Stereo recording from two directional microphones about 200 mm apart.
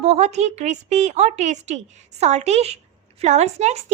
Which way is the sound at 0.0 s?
30° right (ahead or behind).